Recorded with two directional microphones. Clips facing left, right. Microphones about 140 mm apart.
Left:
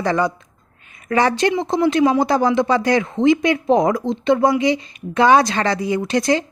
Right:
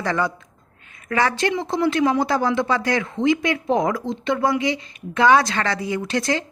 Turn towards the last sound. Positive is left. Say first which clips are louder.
# left 5 dB
turn(degrees=15)  # may be behind; listen again after turning